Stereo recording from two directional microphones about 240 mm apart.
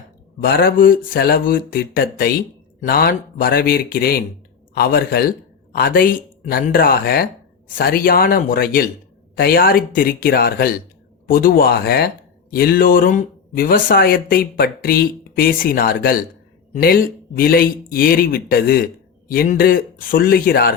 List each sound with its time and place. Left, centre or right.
0.4 s speech: left